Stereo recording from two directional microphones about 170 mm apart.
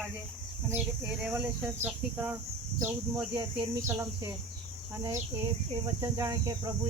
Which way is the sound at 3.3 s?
20° right (ahead or behind).